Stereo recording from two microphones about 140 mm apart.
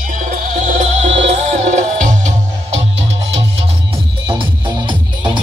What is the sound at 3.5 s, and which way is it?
Music, 40° right (ahead or behind).